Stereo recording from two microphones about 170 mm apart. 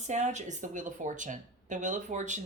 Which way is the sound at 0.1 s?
45° right (ahead or behind).